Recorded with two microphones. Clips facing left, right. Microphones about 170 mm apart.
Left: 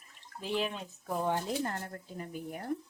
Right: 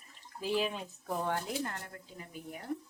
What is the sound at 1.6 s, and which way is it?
Speech, 40° left (ahead or behind).